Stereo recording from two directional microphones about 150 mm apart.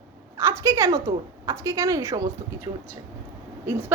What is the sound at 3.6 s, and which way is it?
Speech, 15° right (ahead or behind).